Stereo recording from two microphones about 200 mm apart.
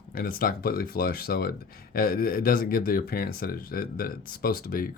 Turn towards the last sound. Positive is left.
turn(degrees=45)  # may be behind; listen again after turning